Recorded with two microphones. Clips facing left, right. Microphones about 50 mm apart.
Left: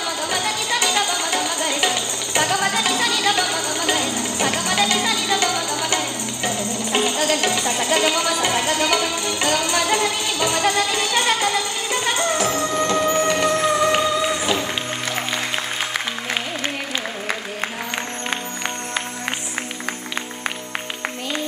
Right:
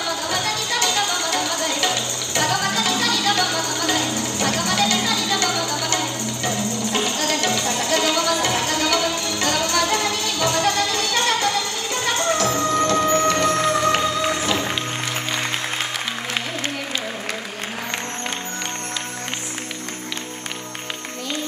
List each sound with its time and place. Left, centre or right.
0.3 s music: left